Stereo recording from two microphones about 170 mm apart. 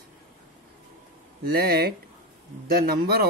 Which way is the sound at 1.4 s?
65° right (ahead or behind).